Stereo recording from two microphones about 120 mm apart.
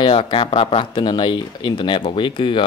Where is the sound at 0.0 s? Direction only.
45° left (ahead or behind).